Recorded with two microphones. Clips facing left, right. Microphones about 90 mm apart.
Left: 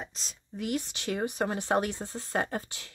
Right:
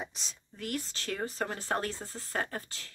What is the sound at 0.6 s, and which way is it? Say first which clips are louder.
Speech: left 5 dB; 15° left (ahead or behind).